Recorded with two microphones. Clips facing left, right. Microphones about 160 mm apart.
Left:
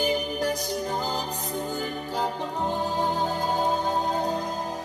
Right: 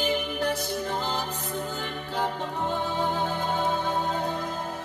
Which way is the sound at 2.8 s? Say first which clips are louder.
Left 1 dB; 40° left (ahead or behind).